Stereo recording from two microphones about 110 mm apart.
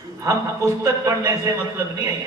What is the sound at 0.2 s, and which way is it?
A man's voice, 25° right (ahead or behind).